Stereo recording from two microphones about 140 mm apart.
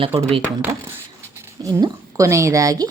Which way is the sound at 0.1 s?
40° right (ahead or behind).